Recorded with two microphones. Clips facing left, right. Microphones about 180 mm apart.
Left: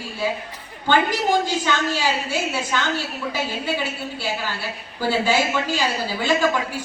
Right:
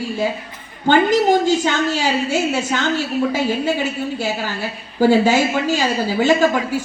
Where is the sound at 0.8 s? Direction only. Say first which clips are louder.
Right 6 dB; 45° right (ahead or behind).